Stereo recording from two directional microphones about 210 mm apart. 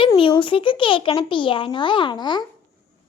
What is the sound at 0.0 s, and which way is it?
A child's voice, 25° left (ahead or behind).